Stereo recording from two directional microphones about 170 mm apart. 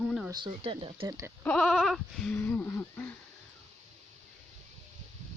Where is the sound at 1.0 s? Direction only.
20° right (ahead or behind).